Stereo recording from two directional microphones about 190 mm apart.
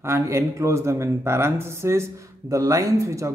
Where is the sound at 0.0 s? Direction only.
15° right (ahead or behind).